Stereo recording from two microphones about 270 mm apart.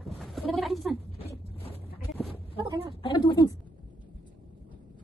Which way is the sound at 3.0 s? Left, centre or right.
Centre.